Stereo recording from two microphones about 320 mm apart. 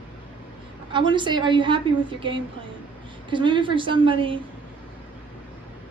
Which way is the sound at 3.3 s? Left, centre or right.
Centre.